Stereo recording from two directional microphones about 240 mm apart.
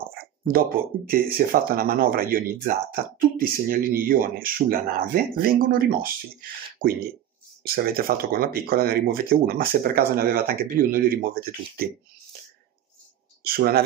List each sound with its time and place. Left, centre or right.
0.5 s speech: right
13.4 s speech: right